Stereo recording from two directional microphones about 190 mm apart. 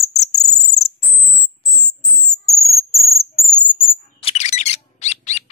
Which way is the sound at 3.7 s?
25° left (ahead or behind).